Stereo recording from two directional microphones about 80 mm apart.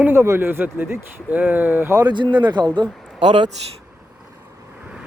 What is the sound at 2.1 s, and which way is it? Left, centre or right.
Speech, right.